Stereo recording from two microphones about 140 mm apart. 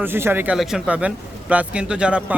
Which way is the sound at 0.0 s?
15° right (ahead or behind).